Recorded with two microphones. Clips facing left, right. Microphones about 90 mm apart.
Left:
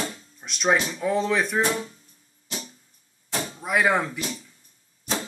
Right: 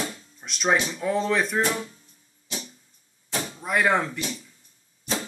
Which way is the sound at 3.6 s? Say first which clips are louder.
Even; 5° left (ahead or behind).